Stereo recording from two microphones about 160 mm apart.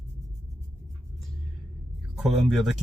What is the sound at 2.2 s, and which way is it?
Speech, centre (ahead or behind).